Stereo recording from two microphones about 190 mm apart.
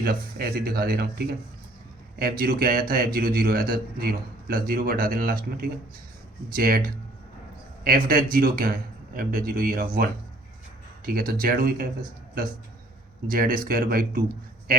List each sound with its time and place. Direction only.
0.0 s a man's voice: 55° right (ahead or behind)
13.2 s a man's voice: 50° right (ahead or behind)